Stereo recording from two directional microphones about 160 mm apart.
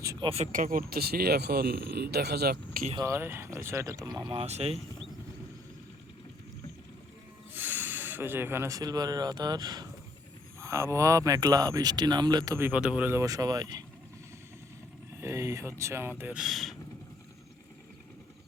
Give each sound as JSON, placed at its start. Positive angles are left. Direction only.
{"t": 0.0, "sound": "a sound", "side_deg": -20}
{"t": 0.5, "sound": "speech", "side_deg": -60}
{"t": 3.0, "sound": "speech", "side_deg": -15}
{"t": 4.3, "sound": "speech", "side_deg": -40}
{"t": 7.5, "sound": "speech", "side_deg": -10}
{"t": 12.5, "sound": "speech", "side_deg": -10}
{"t": 15.2, "sound": "speech", "side_deg": -20}